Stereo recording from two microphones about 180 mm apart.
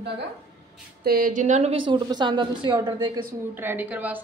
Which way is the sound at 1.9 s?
25° right (ahead or behind).